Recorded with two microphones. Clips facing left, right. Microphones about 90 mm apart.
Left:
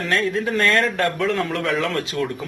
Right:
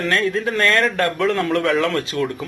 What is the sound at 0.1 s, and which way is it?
A man's voice, 5° left (ahead or behind).